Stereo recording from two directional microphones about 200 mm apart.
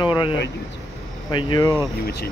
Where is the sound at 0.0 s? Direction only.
25° left (ahead or behind).